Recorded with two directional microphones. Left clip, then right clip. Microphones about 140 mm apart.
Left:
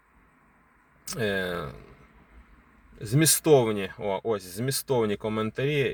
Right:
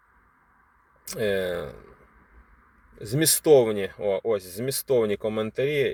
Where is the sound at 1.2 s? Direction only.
5° left (ahead or behind).